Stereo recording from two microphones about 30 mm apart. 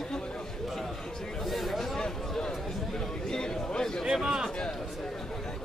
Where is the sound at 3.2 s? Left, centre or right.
Left.